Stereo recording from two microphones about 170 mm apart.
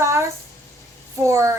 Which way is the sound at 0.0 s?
15° right (ahead or behind).